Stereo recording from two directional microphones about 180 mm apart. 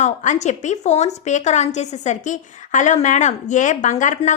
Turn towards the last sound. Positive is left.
turn(degrees=40)  # may be behind; listen again after turning